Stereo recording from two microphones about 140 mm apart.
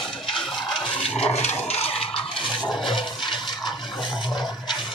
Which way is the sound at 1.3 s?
50° left (ahead or behind).